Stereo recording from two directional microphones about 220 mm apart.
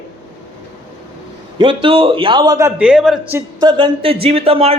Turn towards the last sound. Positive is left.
turn(degrees=-25)  # may be behind; listen again after turning